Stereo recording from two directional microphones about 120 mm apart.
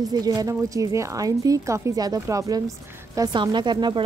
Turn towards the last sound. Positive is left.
turn(degrees=-40)  # may be behind; listen again after turning